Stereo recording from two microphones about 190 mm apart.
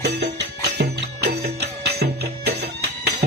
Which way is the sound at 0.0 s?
60° right (ahead or behind).